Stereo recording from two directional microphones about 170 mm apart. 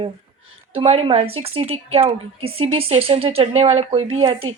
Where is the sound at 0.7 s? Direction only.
35° right (ahead or behind).